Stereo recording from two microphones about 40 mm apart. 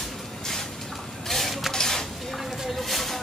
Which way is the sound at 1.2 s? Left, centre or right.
Centre.